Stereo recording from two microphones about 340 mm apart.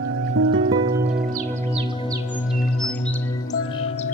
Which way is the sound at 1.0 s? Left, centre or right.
Right.